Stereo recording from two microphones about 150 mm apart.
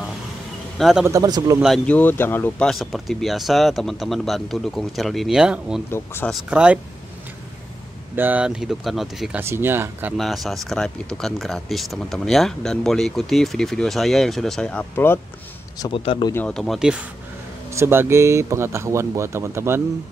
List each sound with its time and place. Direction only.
0.7 s a man's voice: centre (ahead or behind)
1.0 s speech: 25° right (ahead or behind)
1.6 s speech: centre (ahead or behind)
2.0 s speech: 15° left (ahead or behind)
2.7 s speech: centre (ahead or behind)
5.9 s speech: 15° left (ahead or behind)
6.5 s speech: 5° right (ahead or behind)
8.2 s speech: 10° right (ahead or behind)
9.4 s speech: 15° right (ahead or behind)
10.1 s speech: centre (ahead or behind)
15.8 s speech: 35° left (ahead or behind)
16.4 s speech: 5° left (ahead or behind)
17.7 s speech: 15° right (ahead or behind)